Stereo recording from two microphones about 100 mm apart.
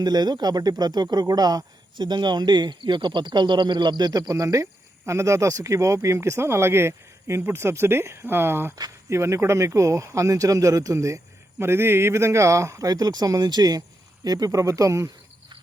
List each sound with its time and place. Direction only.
0.0 s speech: 45° right (ahead or behind)
12.9 s speech: 40° right (ahead or behind)